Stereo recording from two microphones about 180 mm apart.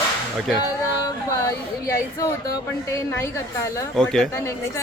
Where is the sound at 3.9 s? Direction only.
5° left (ahead or behind).